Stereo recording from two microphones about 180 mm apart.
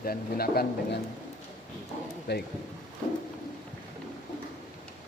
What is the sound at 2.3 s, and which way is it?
Speech, 70° left (ahead or behind).